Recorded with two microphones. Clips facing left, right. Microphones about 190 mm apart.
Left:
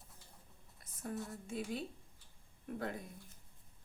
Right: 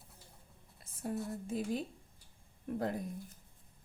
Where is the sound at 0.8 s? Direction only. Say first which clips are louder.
Right 4 dB; 30° right (ahead or behind).